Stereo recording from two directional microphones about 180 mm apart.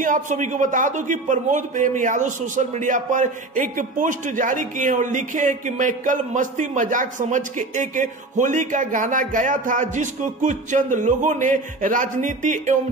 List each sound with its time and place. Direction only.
0.0 s a man's voice: 45° right (ahead or behind)